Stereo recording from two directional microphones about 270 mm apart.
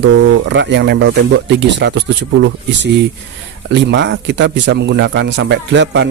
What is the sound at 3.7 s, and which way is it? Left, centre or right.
Speech, right.